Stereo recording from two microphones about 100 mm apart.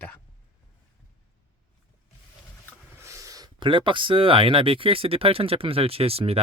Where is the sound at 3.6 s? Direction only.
55° right (ahead or behind).